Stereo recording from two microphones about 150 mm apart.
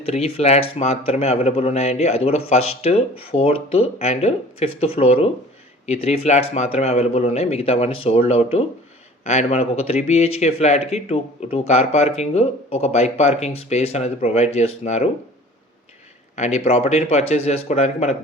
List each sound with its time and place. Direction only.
0.0 s speech: 45° left (ahead or behind)
16.3 s speech: 50° left (ahead or behind)